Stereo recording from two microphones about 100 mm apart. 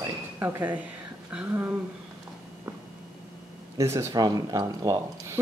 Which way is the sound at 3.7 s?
30° right (ahead or behind).